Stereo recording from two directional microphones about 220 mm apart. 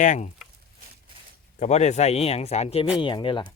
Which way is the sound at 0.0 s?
35° left (ahead or behind).